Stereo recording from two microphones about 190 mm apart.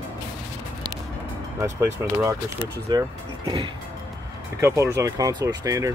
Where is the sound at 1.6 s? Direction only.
15° right (ahead or behind).